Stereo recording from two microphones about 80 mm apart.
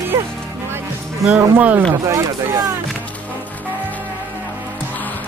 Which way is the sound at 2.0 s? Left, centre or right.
Right.